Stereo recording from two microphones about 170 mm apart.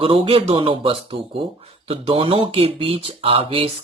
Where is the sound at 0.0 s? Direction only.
35° right (ahead or behind).